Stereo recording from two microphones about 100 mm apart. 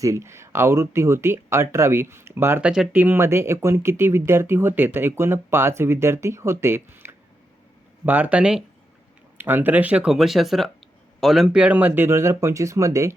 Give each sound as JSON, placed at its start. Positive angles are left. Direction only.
{"t": 0.0, "sound": "speech", "side_deg": -30}
{"t": 2.6, "sound": "speech", "side_deg": -10}
{"t": 2.9, "sound": "speech", "side_deg": -20}